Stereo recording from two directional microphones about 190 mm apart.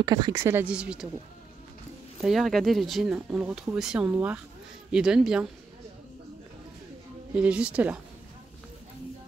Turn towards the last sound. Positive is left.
turn(degrees=-5)  # may be behind; listen again after turning